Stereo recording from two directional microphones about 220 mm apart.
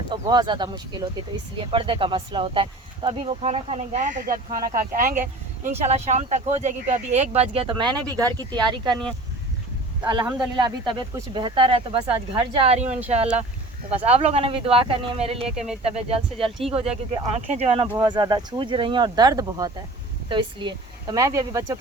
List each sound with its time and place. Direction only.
0.1 s speech: 20° right (ahead or behind)
10.2 s speech: 5° right (ahead or behind)
10.6 s speech: 20° right (ahead or behind)
15.5 s speech: 5° right (ahead or behind)
15.8 s speech: 25° right (ahead or behind)